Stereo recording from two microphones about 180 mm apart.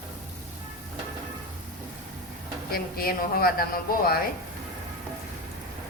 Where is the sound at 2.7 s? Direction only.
55° left (ahead or behind).